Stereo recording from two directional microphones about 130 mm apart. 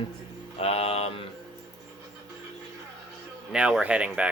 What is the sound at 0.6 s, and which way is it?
Mantra, 50° left (ahead or behind).